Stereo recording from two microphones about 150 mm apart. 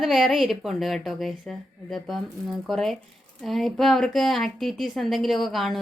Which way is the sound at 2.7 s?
Centre (ahead or behind).